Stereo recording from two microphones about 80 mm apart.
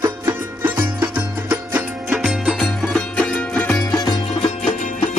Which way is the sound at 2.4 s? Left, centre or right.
Centre.